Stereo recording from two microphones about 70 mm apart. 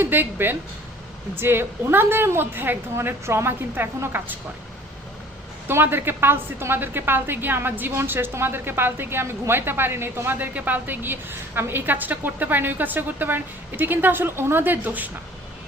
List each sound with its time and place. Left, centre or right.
0.0 s a woman's voice: right
5.6 s a woman's voice: right